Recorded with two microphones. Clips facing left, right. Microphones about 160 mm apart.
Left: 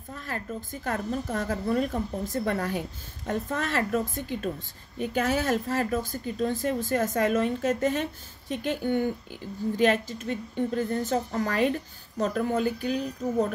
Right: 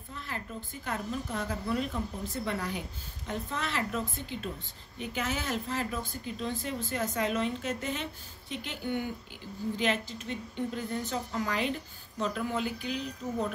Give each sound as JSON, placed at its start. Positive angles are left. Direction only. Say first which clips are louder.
{"t": 0.1, "sound": "speech", "louder": "left 5 dB", "side_deg": 45}